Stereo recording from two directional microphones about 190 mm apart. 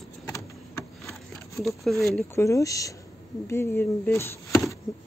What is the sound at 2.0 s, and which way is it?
Speech, 15° left (ahead or behind).